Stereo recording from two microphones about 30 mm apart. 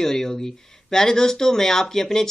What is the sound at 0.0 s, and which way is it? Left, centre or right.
Speech, centre.